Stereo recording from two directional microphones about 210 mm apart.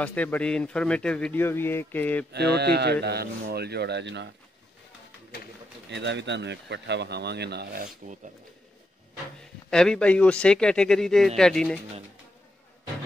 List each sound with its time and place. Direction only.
0.0 s speech: 5° left (ahead or behind)
2.3 s speech: 50° right (ahead or behind)
5.9 s speech: 55° right (ahead or behind)
9.7 s speech: 5° left (ahead or behind)